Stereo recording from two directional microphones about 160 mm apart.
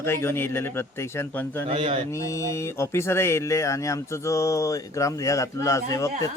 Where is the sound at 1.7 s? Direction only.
35° right (ahead or behind).